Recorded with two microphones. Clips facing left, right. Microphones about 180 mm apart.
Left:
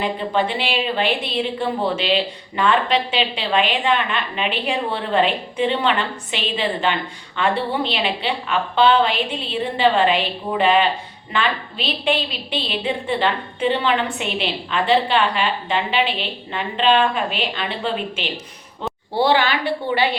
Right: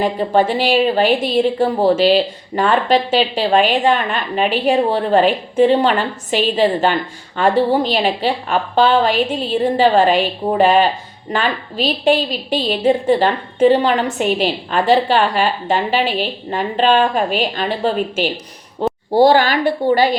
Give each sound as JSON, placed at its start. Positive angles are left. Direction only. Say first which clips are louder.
{"t": 0.0, "sound": "a woman's voice", "louder": "right 6 dB", "side_deg": -40}
{"t": 18.8, "sound": "a sound", "louder": "right 9 dB", "side_deg": -40}
{"t": 19.1, "sound": "a woman's voice", "louder": "right 6 dB", "side_deg": -40}